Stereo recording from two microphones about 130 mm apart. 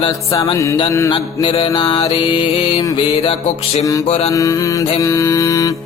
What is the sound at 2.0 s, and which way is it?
Music, 40° left (ahead or behind).